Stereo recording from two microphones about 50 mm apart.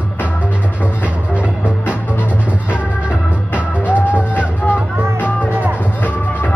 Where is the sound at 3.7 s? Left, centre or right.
Left.